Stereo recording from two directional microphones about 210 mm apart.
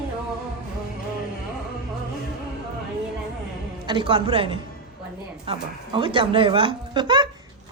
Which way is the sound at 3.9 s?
25° right (ahead or behind).